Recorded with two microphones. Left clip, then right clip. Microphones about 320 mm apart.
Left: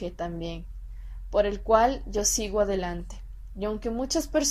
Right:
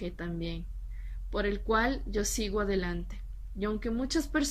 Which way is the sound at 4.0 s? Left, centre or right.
Centre.